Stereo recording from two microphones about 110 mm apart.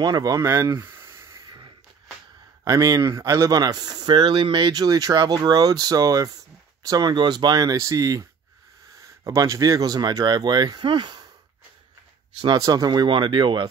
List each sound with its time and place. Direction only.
0.0 s speech: 35° right (ahead or behind)
2.6 s speech: 35° right (ahead or behind)
12.5 s speech: 35° right (ahead or behind)